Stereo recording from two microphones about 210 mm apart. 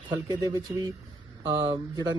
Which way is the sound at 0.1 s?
15° right (ahead or behind).